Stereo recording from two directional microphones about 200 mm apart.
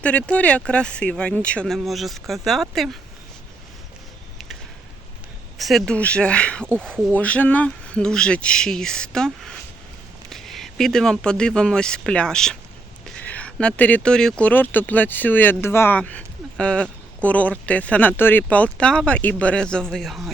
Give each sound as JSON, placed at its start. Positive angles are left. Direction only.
{"t": 0.0, "sound": "speech", "side_deg": 5}
{"t": 5.5, "sound": "speech", "side_deg": 0}